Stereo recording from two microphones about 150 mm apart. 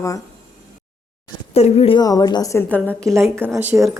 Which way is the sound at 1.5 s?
40° left (ahead or behind).